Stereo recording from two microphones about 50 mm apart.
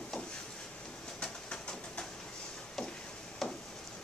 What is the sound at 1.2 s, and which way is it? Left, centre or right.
Train, centre.